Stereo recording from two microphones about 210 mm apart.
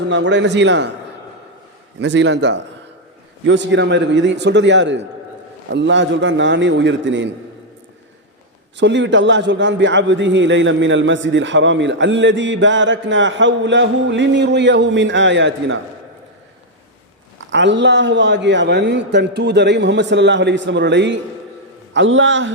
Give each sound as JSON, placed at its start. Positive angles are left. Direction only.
{"t": 0.1, "sound": "a man's voice", "side_deg": -55}
{"t": 2.0, "sound": "a man's voice", "side_deg": -55}
{"t": 8.8, "sound": "a man's voice", "side_deg": -60}
{"t": 17.5, "sound": "a man's voice", "side_deg": -55}